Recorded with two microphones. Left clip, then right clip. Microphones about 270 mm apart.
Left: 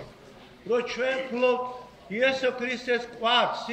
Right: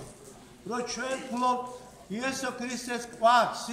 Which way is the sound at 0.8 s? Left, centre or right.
Centre.